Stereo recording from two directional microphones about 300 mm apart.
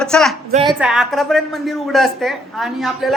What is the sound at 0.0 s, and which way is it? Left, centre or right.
A woman's voice, centre.